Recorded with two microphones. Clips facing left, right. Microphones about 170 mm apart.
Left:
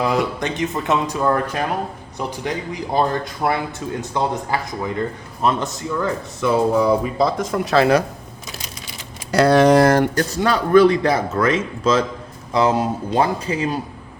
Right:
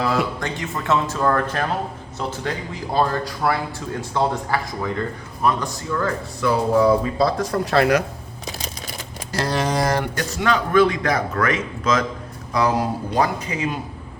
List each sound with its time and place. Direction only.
0.3 s a man's voice: 20° left (ahead or behind)
9.3 s speech: 65° left (ahead or behind)
10.2 s a man's voice: 35° left (ahead or behind)